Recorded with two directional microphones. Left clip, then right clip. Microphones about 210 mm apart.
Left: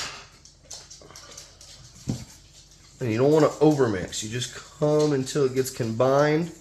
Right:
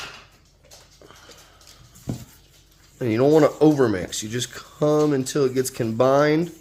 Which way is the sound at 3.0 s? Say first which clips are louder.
Right 3 dB; 35° right (ahead or behind).